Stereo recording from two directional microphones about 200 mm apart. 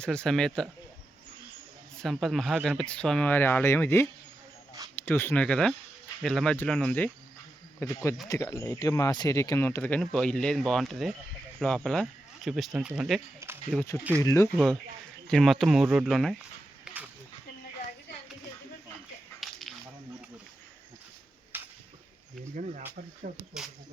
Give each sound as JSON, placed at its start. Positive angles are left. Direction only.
{"t": 0.0, "sound": "speech", "side_deg": 5}
{"t": 2.0, "sound": "speech", "side_deg": 0}
{"t": 14.2, "sound": "speech", "side_deg": 15}
{"t": 14.5, "sound": "speech", "side_deg": 0}
{"t": 16.8, "sound": "a sound", "side_deg": -5}
{"t": 19.4, "sound": "whip", "side_deg": 0}
{"t": 21.5, "sound": "a sound", "side_deg": -10}
{"t": 22.5, "sound": "speech", "side_deg": -40}